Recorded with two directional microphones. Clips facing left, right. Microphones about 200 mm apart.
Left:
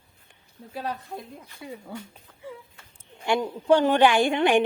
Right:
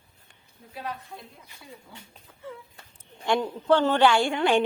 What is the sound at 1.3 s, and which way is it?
Speech, 60° left (ahead or behind).